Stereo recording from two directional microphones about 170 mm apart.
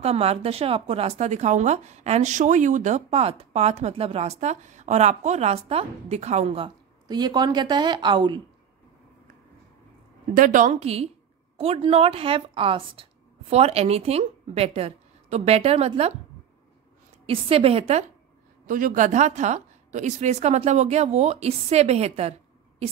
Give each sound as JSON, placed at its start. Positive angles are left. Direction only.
{"t": 0.0, "sound": "a woman's voice", "side_deg": -35}
{"t": 10.3, "sound": "a woman's voice", "side_deg": -50}
{"t": 17.3, "sound": "a woman's voice", "side_deg": -35}
{"t": 18.7, "sound": "a woman's voice", "side_deg": -50}